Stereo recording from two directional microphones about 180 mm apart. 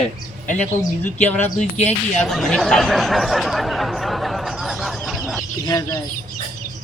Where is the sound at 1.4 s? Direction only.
40° left (ahead or behind).